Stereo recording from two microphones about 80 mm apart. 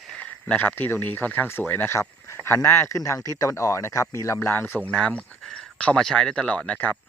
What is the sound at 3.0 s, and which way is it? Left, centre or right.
Speech, left.